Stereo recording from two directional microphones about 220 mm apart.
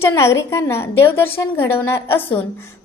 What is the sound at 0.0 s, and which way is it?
A woman's voice, 10° left (ahead or behind).